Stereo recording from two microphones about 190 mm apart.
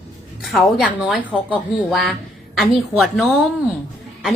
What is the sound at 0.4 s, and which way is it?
Speech, centre (ahead or behind).